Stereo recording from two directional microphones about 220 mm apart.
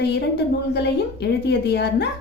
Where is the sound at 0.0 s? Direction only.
50° left (ahead or behind).